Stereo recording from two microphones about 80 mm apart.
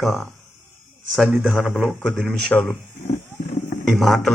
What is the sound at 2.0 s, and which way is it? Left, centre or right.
Speech, centre.